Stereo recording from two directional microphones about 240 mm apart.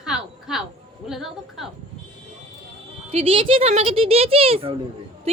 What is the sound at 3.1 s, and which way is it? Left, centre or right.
Speech, right.